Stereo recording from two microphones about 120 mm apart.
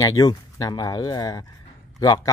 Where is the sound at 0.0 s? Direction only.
30° left (ahead or behind).